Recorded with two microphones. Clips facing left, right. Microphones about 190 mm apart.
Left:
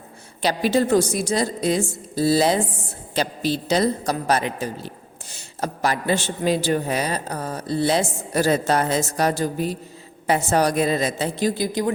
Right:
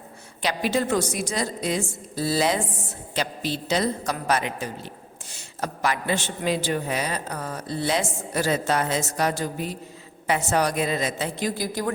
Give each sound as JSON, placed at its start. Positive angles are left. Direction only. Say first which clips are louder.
{"t": 0.4, "sound": "a man's voice", "louder": "left 4 dB", "side_deg": 35}